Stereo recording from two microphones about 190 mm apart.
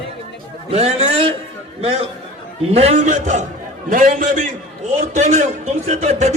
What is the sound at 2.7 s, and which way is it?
A man's voice, 35° right (ahead or behind).